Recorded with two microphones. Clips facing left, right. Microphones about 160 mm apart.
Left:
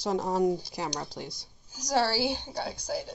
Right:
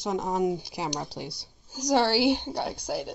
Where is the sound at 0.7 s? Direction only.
20° right (ahead or behind).